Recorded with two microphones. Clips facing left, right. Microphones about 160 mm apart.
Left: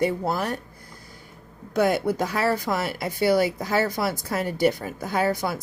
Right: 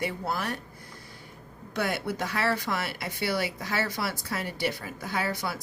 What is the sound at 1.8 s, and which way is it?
Speech, 40° left (ahead or behind).